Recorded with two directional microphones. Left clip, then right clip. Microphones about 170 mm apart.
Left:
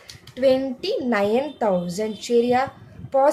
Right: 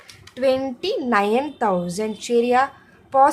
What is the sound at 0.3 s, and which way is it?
A woman's voice, 35° right (ahead or behind).